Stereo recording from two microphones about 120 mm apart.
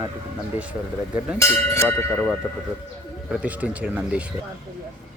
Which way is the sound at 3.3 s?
10° right (ahead or behind).